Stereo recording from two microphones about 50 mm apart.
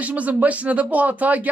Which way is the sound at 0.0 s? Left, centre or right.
Right.